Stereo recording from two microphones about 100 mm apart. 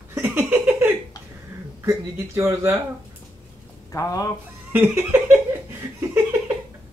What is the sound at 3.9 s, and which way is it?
Speech, 35° left (ahead or behind).